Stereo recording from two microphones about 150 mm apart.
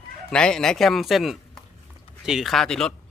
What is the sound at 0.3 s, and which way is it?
Speech, 5° left (ahead or behind).